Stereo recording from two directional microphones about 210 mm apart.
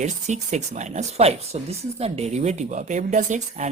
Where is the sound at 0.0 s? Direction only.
35° right (ahead or behind).